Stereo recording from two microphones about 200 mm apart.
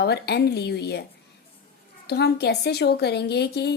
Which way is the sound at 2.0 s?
55° left (ahead or behind).